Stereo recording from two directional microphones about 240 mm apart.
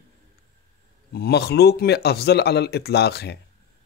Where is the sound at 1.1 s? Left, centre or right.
Left.